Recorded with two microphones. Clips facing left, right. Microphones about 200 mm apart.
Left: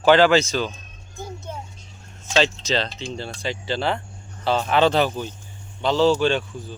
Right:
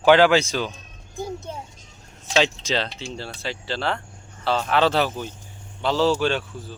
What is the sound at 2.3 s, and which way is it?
Speech, 10° right (ahead or behind).